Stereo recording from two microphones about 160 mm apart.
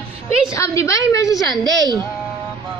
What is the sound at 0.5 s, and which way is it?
A woman's voice, 20° left (ahead or behind).